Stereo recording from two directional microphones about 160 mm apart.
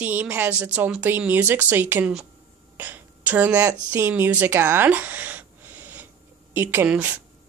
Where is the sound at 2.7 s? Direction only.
10° right (ahead or behind).